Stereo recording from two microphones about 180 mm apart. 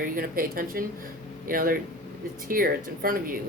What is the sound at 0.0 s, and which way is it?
Speech, 50° right (ahead or behind).